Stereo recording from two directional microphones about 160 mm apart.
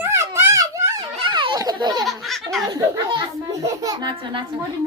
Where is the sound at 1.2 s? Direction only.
30° right (ahead or behind).